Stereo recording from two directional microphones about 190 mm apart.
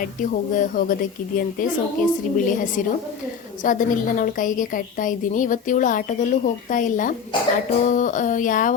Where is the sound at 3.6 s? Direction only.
45° left (ahead or behind).